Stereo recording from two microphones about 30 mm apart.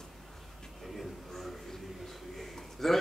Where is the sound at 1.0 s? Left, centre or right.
Centre.